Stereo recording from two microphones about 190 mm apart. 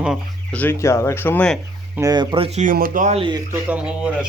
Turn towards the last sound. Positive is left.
turn(degrees=-5)  # may be behind; listen again after turning